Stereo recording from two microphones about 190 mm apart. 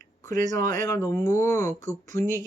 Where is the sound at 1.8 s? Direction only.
40° right (ahead or behind).